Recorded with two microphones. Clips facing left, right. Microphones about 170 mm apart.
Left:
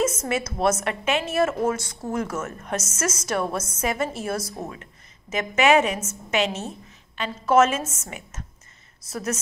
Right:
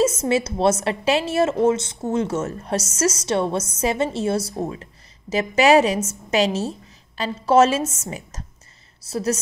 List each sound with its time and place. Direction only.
0.0 s a woman's voice: 30° right (ahead or behind)